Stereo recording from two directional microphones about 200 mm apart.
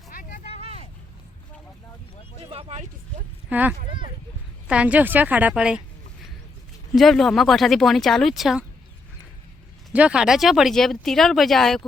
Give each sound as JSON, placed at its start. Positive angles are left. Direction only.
{"t": 0.1, "sound": "vehicle", "side_deg": 40}
{"t": 2.5, "sound": "speech", "side_deg": -30}
{"t": 3.5, "sound": "a woman's voice", "side_deg": -5}
{"t": 6.9, "sound": "speech", "side_deg": 0}
{"t": 9.9, "sound": "speech", "side_deg": -5}